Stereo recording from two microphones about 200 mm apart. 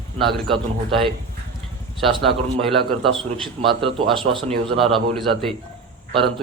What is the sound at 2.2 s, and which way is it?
Speech, centre (ahead or behind).